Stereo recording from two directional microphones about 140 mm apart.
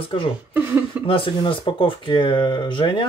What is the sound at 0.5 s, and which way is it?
Speech, 15° right (ahead or behind).